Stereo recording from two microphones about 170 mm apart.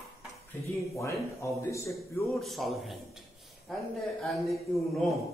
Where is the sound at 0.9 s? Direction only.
15° left (ahead or behind).